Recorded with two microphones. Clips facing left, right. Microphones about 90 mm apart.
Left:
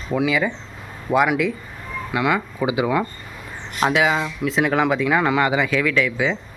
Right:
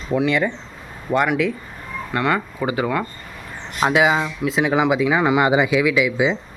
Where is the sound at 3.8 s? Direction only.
5° right (ahead or behind).